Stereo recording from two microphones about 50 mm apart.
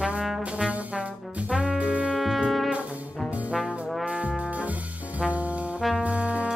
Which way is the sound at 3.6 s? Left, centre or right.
Centre.